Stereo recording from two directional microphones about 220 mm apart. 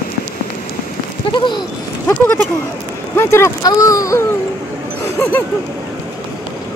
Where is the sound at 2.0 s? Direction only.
10° left (ahead or behind).